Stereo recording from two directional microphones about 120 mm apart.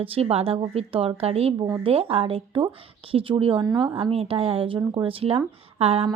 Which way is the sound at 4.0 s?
55° right (ahead or behind).